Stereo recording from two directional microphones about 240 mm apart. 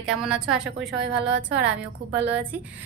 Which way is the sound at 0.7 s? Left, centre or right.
Right.